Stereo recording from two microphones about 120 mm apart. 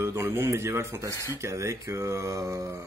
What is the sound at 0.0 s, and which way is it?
Speech, 20° right (ahead or behind).